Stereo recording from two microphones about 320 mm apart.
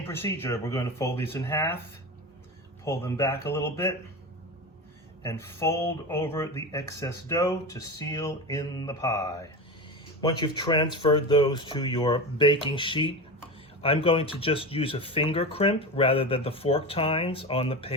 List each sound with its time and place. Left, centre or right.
0.0 s speech: centre
2.8 s speech: centre
5.2 s speech: centre